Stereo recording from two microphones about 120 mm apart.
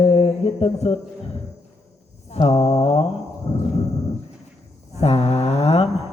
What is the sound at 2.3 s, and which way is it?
Speech, 60° left (ahead or behind).